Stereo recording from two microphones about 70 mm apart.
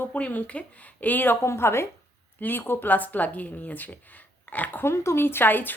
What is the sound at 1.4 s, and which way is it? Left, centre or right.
A woman's voice, left.